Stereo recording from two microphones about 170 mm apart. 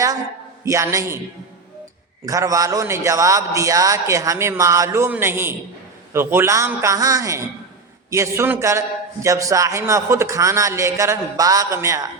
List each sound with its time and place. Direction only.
0.6 s a man's voice: 15° right (ahead or behind)
2.2 s a man's voice: 20° right (ahead or behind)